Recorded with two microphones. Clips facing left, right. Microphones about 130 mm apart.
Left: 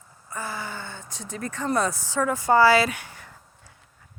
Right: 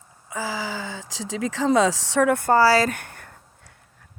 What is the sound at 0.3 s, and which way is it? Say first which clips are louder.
Speech: right 4 dB; 90° right.